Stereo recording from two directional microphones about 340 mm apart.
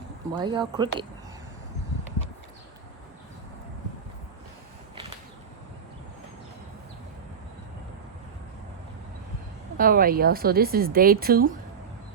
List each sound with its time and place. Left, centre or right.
0.3 s speech: centre
9.7 s speech: right